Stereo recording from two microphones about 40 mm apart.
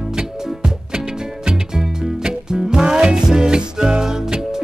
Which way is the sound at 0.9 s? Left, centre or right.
Right.